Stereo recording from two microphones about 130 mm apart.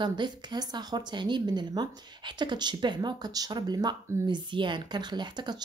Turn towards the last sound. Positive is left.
turn(degrees=-35)  # may be behind; listen again after turning